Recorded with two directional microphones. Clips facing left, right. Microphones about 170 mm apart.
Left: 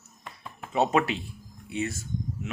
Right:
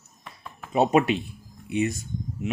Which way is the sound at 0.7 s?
15° right (ahead or behind).